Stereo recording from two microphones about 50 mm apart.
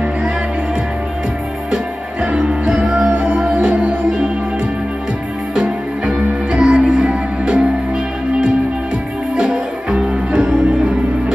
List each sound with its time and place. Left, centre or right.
2.3 s music: centre
5.5 s music: right
9.4 s music: right